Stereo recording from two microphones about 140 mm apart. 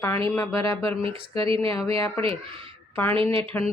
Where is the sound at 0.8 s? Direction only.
40° right (ahead or behind).